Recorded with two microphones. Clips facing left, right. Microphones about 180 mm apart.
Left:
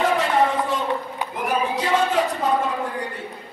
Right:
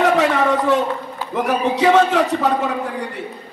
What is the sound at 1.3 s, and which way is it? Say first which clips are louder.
A man's voice: right 5 dB; 75° right (ahead or behind).